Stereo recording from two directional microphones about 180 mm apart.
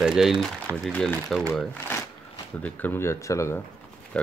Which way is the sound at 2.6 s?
10° left (ahead or behind).